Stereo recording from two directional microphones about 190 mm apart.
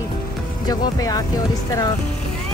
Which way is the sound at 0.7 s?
20° left (ahead or behind).